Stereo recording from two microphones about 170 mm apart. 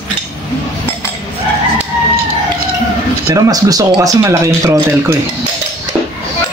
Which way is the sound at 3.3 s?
20° right (ahead or behind).